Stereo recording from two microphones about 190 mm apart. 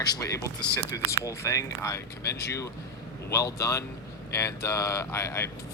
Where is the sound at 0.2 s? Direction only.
15° left (ahead or behind).